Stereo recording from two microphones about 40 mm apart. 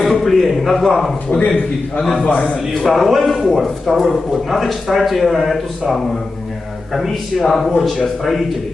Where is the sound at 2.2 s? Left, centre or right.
Left.